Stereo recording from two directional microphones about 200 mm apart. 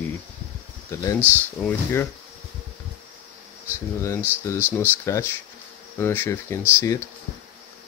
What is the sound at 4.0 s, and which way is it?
Speech, 15° left (ahead or behind).